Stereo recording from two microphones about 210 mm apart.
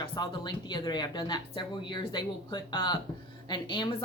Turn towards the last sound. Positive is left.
turn(degrees=25)  # may be behind; listen again after turning